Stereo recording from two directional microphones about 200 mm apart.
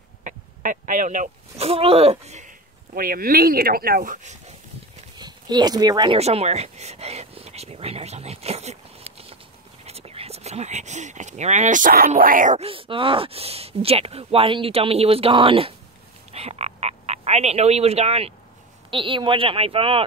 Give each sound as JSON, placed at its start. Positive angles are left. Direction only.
{"t": 0.2, "sound": "speech", "side_deg": -40}
{"t": 5.1, "sound": "speech", "side_deg": -20}
{"t": 6.1, "sound": "speech", "side_deg": -30}